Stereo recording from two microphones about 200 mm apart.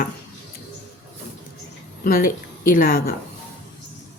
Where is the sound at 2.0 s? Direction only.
45° left (ahead or behind).